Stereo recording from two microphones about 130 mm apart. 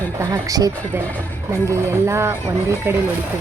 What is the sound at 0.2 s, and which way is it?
Speech, 25° right (ahead or behind).